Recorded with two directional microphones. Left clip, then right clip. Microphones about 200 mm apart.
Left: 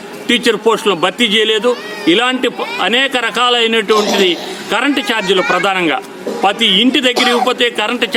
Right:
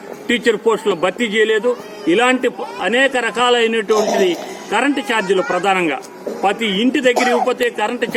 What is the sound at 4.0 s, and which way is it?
Speech, 45° left (ahead or behind).